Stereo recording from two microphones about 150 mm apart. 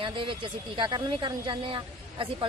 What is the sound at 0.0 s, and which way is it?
Speech, 35° right (ahead or behind).